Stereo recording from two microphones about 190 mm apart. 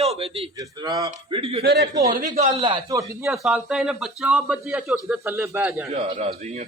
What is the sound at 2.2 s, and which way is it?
Speech, 45° right (ahead or behind).